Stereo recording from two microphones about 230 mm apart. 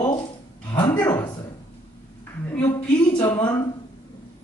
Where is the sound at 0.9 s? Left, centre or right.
Centre.